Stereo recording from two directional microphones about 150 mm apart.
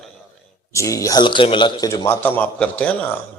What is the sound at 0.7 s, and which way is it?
Speech, 20° left (ahead or behind).